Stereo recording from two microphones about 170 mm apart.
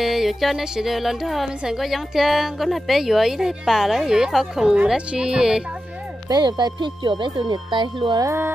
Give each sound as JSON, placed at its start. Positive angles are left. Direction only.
{"t": 0.0, "sound": "speech", "side_deg": 0}
{"t": 6.2, "sound": "speech", "side_deg": -25}